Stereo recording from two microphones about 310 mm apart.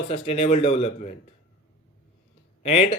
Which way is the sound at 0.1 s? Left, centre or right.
Centre.